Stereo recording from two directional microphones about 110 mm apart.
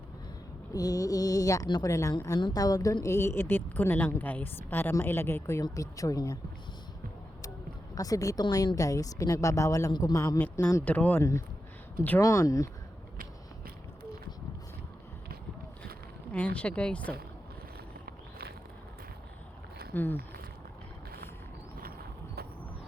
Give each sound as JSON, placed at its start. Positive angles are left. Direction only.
{"t": 0.7, "sound": "a woman's voice", "side_deg": 35}
{"t": 7.9, "sound": "a woman's voice", "side_deg": 30}
{"t": 16.3, "sound": "speech", "side_deg": 10}
{"t": 19.9, "sound": "speech", "side_deg": 15}